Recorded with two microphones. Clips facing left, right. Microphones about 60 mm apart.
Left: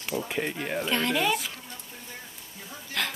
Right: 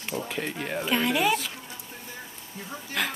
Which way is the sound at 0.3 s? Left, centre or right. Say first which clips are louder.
Left 2 dB; centre.